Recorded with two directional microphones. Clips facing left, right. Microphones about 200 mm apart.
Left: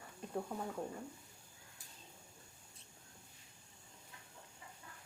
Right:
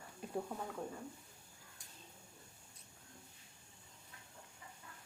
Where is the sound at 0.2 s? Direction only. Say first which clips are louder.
Even; 5° right (ahead or behind).